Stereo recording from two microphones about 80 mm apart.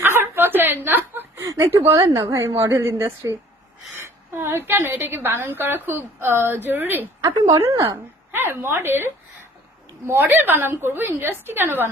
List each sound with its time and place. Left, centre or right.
0.0 s chuckle: right
1.4 s a sound: right
1.9 s a woman's voice: right
7.3 s a woman's voice: right
8.3 s a woman's voice: right